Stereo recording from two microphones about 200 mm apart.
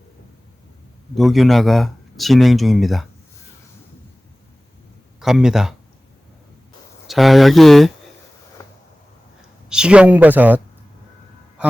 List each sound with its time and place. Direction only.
1.1 s speech: centre (ahead or behind)
5.2 s speech: centre (ahead or behind)
7.1 s speech: centre (ahead or behind)
8.6 s a sound: 20° left (ahead or behind)
9.6 s speech: 5° right (ahead or behind)